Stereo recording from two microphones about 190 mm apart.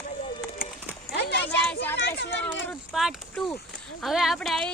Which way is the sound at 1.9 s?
65° left (ahead or behind).